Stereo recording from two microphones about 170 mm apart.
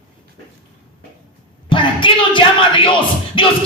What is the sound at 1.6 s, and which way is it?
Speech, 30° left (ahead or behind).